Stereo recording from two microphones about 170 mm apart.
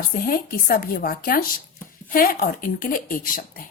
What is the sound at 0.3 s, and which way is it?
A woman's voice, 60° left (ahead or behind).